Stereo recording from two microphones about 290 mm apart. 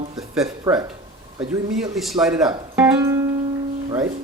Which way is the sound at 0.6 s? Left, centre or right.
Centre.